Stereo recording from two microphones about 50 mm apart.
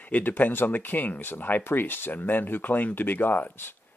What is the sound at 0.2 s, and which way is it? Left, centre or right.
Speech, left.